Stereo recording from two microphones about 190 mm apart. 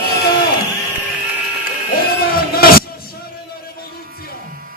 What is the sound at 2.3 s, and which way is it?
Music, 50° left (ahead or behind).